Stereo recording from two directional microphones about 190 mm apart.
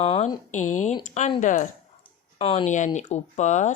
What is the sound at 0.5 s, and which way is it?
Speech, 40° left (ahead or behind).